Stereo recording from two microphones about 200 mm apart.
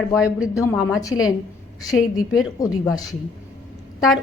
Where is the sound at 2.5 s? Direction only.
15° left (ahead or behind).